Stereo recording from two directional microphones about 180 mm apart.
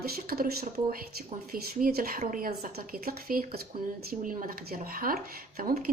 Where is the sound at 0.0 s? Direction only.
60° right (ahead or behind).